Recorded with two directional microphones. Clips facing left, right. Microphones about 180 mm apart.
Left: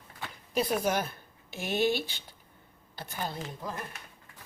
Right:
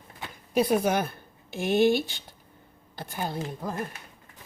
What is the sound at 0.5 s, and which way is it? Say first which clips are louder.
Speech: right 5 dB; 55° right (ahead or behind).